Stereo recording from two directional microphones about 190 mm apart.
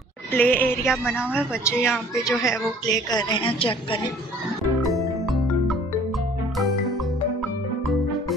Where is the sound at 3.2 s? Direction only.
25° left (ahead or behind).